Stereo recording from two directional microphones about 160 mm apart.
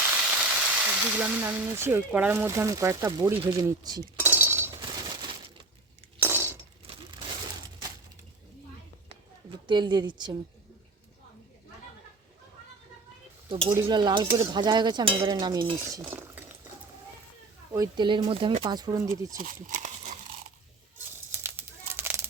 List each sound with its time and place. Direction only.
0.0 s speech: 10° right (ahead or behind); by 4.0 s 25° right (ahead or behind)
4.2 s chink: 15° right (ahead or behind)
4.8 s a sound: 30° right (ahead or behind)
6.2 s a sound: 15° right (ahead or behind)
6.8 s crumpling: 35° right (ahead or behind)
9.6 s speech: 30° right (ahead or behind)
13.5 s speech: 35° right (ahead or behind)
15.7 s cutlery: 15° right (ahead or behind)
16.0 s chink: 15° right (ahead or behind)
17.7 s speech: 30° right (ahead or behind)
19.6 s a sound: 50° right (ahead or behind)
21.3 s crumpling: 15° right (ahead or behind)